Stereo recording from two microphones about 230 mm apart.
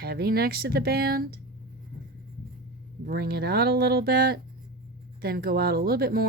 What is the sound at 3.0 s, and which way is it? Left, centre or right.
Speech, right.